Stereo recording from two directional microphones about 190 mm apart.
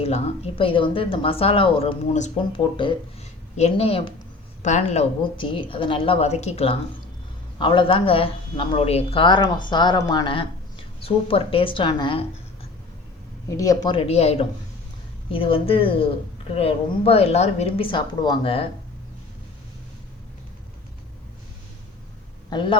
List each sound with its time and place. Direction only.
0.0 s a woman's voice: 30° left (ahead or behind)
3.6 s a woman's voice: 35° left (ahead or behind)
13.5 s a woman's voice: 15° left (ahead or behind)
22.4 s a man's voice: 25° left (ahead or behind)